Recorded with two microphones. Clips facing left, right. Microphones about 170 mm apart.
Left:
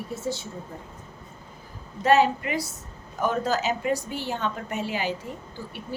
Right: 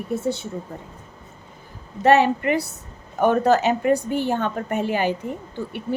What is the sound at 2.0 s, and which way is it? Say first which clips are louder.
A woman's voice: right 4 dB; 65° right (ahead or behind).